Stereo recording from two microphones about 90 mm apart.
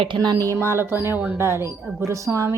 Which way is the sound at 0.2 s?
45° right (ahead or behind).